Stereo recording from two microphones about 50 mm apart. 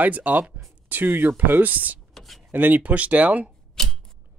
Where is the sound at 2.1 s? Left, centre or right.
Centre.